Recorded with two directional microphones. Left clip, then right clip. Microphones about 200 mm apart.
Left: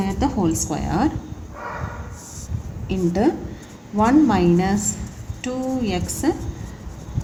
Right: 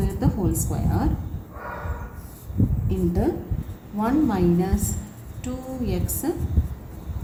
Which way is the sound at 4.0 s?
50° left (ahead or behind).